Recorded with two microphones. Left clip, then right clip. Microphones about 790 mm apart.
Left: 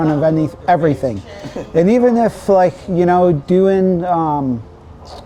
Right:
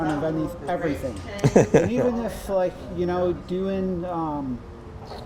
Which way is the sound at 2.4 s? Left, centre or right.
Left.